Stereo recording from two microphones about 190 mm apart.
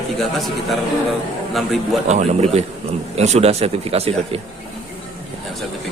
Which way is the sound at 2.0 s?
35° right (ahead or behind).